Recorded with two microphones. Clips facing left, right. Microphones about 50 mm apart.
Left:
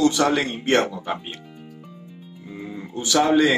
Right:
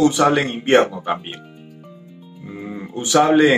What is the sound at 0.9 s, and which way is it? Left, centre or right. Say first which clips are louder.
Speech: right 5 dB; right.